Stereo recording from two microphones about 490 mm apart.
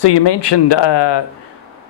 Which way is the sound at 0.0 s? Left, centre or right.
Left.